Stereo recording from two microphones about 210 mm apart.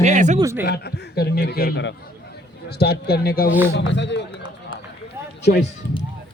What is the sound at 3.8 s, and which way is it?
Speech, 55° left (ahead or behind).